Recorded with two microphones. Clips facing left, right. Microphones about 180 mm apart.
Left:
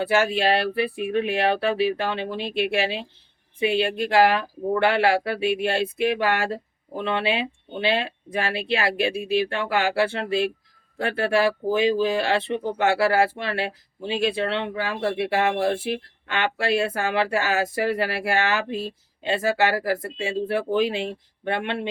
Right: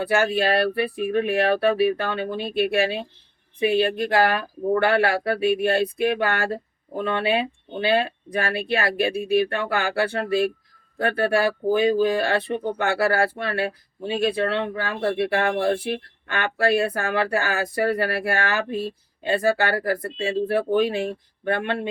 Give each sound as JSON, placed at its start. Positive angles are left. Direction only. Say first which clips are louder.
{"t": 0.0, "sound": "speech", "louder": "even", "side_deg": 25}